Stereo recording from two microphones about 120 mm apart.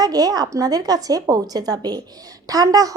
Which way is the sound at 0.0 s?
30° right (ahead or behind).